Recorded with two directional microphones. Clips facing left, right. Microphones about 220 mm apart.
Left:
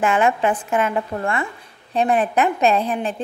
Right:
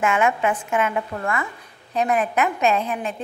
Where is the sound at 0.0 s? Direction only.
35° left (ahead or behind).